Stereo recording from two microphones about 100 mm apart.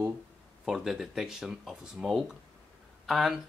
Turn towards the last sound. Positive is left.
turn(degrees=0)  # may be behind; listen again after turning